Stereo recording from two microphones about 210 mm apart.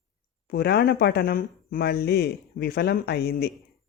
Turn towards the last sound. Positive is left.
turn(degrees=50)  # may be behind; listen again after turning